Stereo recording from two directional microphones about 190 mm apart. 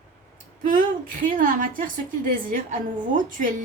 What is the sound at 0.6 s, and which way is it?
A woman's voice, 45° right (ahead or behind).